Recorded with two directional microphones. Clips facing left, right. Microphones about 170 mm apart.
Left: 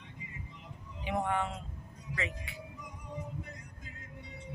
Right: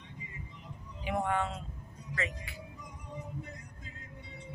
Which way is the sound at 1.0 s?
15° left (ahead or behind).